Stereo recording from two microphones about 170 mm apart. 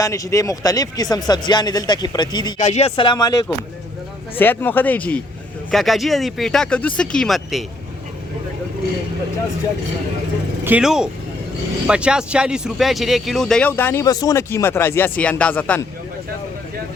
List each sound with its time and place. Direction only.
0.0 s speech: 20° left (ahead or behind)
2.6 s speech: 40° left (ahead or behind); by 7.6 s centre (ahead or behind)
10.6 s speech: 10° right (ahead or behind); by 15.8 s 10° left (ahead or behind)